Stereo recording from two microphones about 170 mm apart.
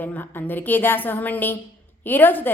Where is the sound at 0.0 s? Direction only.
10° left (ahead or behind).